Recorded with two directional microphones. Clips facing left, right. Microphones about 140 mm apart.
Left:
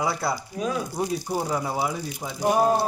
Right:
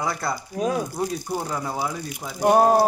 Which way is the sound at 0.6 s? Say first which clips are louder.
Right 5 dB; 40° right (ahead or behind).